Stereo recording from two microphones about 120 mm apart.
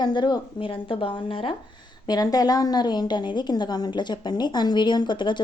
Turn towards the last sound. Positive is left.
turn(degrees=40)  # may be behind; listen again after turning